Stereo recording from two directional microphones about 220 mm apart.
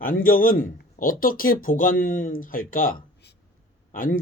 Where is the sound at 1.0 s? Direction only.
40° left (ahead or behind).